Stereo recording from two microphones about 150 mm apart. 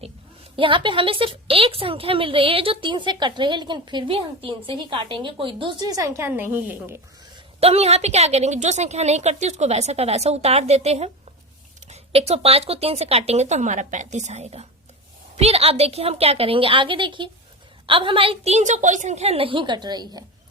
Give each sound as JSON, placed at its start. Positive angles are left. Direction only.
{"t": 0.5, "sound": "a woman's voice", "side_deg": -35}
{"t": 7.6, "sound": "a woman's voice", "side_deg": -45}